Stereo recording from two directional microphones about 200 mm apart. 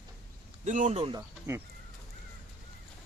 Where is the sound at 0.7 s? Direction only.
35° right (ahead or behind).